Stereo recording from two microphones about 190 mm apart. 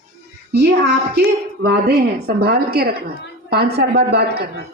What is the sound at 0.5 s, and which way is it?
Speech, 60° right (ahead or behind).